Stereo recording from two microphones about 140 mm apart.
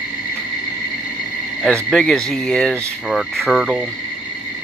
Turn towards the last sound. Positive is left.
turn(degrees=-5)  # may be behind; listen again after turning